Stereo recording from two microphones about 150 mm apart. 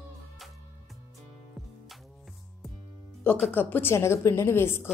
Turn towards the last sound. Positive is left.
turn(degrees=15)  # may be behind; listen again after turning